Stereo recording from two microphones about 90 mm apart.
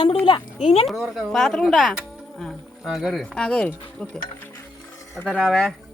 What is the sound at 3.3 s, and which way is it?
Speech, 10° left (ahead or behind).